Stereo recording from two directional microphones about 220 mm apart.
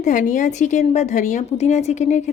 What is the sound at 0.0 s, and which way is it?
A woman's voice, 35° left (ahead or behind).